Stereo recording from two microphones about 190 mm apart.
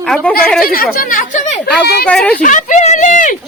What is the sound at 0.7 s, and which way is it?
Speech, 50° left (ahead or behind).